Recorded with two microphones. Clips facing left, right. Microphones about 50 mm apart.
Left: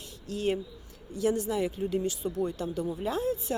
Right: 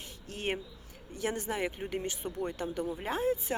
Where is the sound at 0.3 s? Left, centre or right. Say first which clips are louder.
Left 6 dB; right.